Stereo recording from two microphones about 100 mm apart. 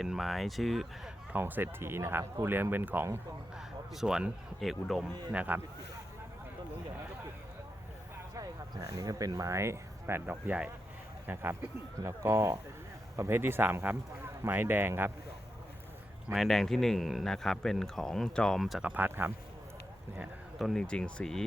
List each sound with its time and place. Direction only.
0.0 s speech: centre (ahead or behind)
1.3 s speech: 20° right (ahead or behind)
3.9 s speech: 5° right (ahead or behind)
5.3 s speech: 15° right (ahead or behind)
8.4 s speech: 40° right (ahead or behind); by 15.1 s 20° right (ahead or behind)
16.3 s speech: centre (ahead or behind)
18.8 s speech: 15° right (ahead or behind)
20.6 s speech: centre (ahead or behind)